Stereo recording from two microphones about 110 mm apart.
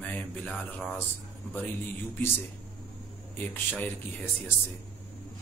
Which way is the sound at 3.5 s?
20° left (ahead or behind).